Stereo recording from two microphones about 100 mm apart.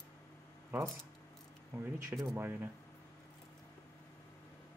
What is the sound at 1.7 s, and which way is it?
Speech, 25° right (ahead or behind).